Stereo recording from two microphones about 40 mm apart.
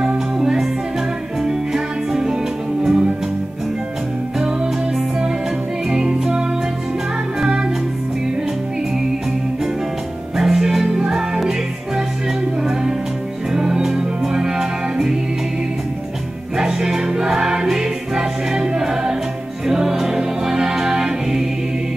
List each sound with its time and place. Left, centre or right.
0.0 s music: centre
4.4 s music: centre
7.3 s music: centre
10.3 s music: centre
13.5 s music: centre
16.5 s music: centre